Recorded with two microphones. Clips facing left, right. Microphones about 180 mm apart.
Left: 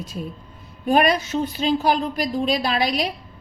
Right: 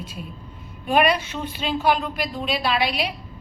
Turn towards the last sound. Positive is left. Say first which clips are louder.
# left 1 dB
turn(degrees=40)  # may be behind; listen again after turning